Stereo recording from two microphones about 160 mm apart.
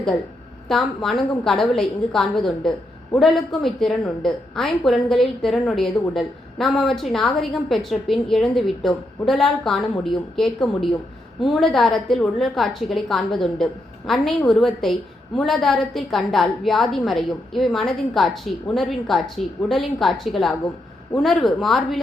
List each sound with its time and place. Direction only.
0.7 s a woman's voice: centre (ahead or behind)